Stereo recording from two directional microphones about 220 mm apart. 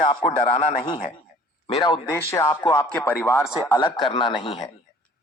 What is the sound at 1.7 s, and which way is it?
Speech, 20° left (ahead or behind).